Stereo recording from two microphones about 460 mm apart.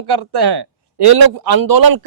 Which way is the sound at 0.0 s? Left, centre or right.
Right.